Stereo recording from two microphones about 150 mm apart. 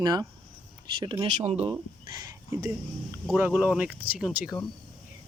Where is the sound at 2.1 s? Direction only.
25° right (ahead or behind).